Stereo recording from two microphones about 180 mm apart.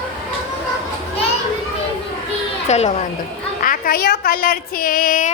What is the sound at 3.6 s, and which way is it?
A woman's voice, 50° left (ahead or behind).